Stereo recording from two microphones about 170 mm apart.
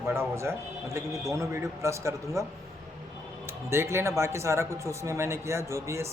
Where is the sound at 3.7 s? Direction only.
15° right (ahead or behind).